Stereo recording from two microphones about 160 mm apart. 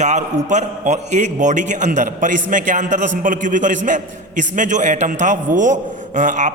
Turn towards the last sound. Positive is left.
turn(degrees=-50)  # may be behind; listen again after turning